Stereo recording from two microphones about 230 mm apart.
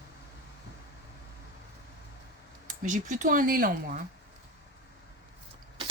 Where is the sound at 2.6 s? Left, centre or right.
Right.